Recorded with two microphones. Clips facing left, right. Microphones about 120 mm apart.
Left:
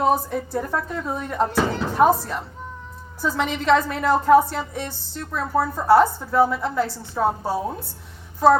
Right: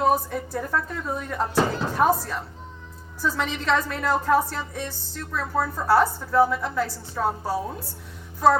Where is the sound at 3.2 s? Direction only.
25° left (ahead or behind).